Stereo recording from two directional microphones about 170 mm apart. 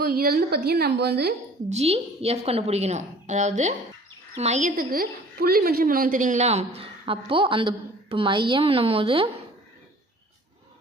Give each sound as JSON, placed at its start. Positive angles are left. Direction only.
{"t": 0.0, "sound": "a woman's voice", "side_deg": -60}
{"t": 1.7, "sound": "a woman's voice", "side_deg": -35}